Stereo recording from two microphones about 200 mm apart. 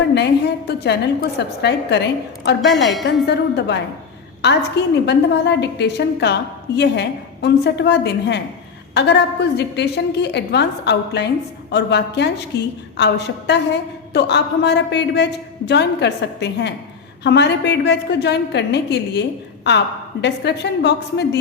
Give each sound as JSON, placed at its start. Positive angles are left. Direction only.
{"t": 0.1, "sound": "a man's voice", "side_deg": 60}
{"t": 2.7, "sound": "a woman's voice", "side_deg": 0}
{"t": 3.2, "sound": "a man's voice", "side_deg": 60}